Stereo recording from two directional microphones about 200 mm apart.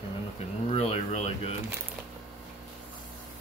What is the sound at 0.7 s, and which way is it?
Speech, 30° left (ahead or behind).